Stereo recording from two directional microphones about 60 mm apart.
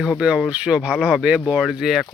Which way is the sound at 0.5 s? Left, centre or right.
Centre.